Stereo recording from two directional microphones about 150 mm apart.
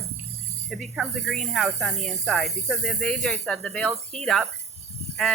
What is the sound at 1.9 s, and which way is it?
Speech, 50° right (ahead or behind).